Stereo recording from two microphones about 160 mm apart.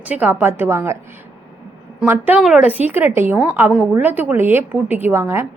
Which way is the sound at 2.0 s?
10° right (ahead or behind).